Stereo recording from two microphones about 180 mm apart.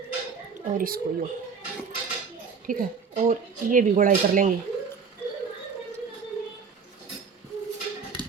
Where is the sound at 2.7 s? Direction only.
50° right (ahead or behind).